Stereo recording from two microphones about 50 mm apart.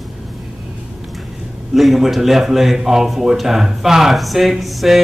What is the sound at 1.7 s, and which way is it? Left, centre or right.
A man's voice, centre.